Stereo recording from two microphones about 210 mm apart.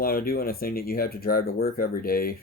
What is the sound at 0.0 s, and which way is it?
Speech, 45° left (ahead or behind).